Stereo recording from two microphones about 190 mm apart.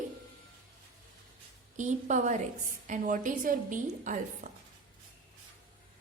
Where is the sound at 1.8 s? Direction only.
40° right (ahead or behind).